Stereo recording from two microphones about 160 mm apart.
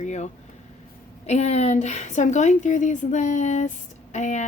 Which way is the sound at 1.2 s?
45° left (ahead or behind).